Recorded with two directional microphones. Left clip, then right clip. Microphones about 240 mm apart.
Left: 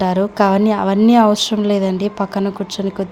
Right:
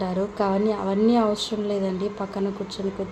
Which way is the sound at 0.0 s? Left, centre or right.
Left.